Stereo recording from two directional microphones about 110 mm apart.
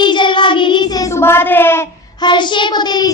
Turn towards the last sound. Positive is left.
turn(degrees=40)  # may be behind; listen again after turning